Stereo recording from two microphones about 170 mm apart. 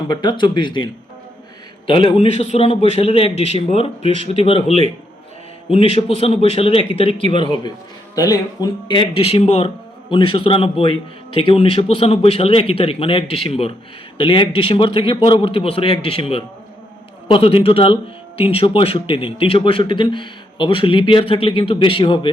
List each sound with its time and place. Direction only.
0.1 s speech: 25° left (ahead or behind)
1.9 s speech: 30° left (ahead or behind)